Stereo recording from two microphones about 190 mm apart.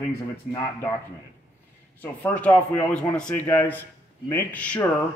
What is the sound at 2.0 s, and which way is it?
Speech, 10° left (ahead or behind).